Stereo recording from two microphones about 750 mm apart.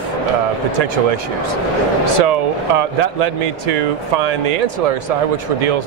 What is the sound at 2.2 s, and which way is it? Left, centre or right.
Speech, right.